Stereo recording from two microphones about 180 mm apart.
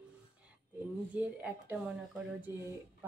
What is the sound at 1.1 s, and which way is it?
Speech, 10° right (ahead or behind).